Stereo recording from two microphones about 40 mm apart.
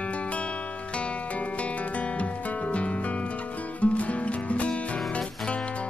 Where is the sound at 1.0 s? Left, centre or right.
Left.